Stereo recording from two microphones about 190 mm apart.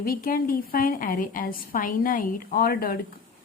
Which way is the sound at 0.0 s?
50° left (ahead or behind).